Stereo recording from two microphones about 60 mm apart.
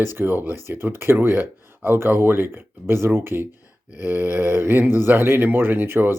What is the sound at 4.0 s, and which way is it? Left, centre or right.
Speech, right.